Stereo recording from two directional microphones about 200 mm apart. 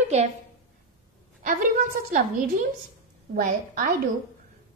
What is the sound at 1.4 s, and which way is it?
Speech, 40° right (ahead or behind).